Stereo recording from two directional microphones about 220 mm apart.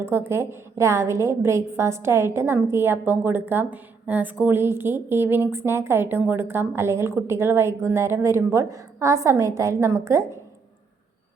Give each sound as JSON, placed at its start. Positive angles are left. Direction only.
{"t": 0.0, "sound": "a woman's voice", "side_deg": -10}